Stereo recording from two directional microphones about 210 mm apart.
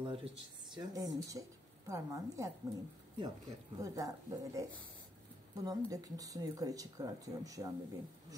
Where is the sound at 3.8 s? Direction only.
15° right (ahead or behind).